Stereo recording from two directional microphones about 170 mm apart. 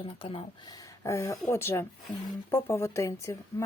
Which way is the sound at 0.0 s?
30° left (ahead or behind).